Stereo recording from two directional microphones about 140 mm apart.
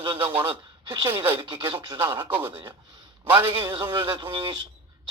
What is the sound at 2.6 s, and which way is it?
A man's voice, 30° right (ahead or behind).